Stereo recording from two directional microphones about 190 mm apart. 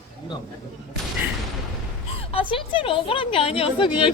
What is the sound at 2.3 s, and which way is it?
A woman's voice, 30° left (ahead or behind).